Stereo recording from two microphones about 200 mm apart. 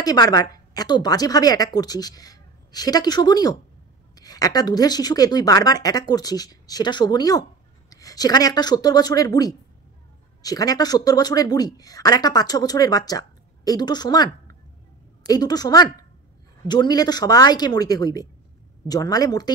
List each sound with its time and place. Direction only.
0.0 s a woman's voice: 20° left (ahead or behind)